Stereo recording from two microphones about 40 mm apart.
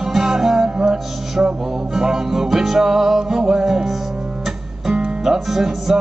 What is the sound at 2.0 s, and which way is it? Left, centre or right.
Music, centre.